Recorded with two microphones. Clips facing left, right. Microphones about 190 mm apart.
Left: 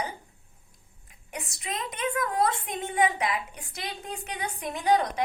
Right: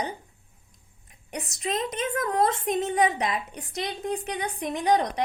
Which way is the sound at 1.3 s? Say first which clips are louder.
Right 3 dB; 40° right (ahead or behind).